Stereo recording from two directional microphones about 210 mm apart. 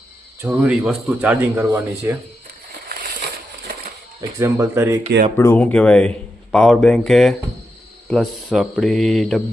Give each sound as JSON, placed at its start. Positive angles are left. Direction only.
{"t": 0.4, "sound": "speech", "side_deg": -5}
{"t": 2.9, "sound": "a sound", "side_deg": -45}
{"t": 4.2, "sound": "speech", "side_deg": -15}
{"t": 5.4, "sound": "a man's voice", "side_deg": 10}